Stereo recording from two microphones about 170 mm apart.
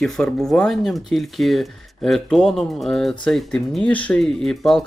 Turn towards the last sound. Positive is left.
turn(degrees=0)  # may be behind; listen again after turning